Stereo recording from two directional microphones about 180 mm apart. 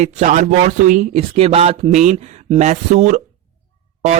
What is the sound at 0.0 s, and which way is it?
Speech, 40° right (ahead or behind).